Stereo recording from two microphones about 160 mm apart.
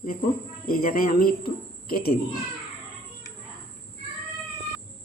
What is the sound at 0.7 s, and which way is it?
Speech, 65° left (ahead or behind).